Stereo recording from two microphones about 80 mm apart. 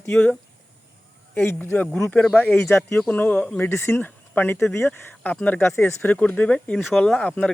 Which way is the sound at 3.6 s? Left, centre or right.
Left.